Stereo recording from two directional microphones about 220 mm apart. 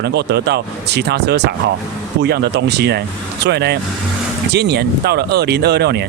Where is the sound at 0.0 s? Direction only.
50° right (ahead or behind).